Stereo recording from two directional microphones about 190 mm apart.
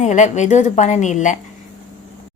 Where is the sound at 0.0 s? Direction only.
40° left (ahead or behind).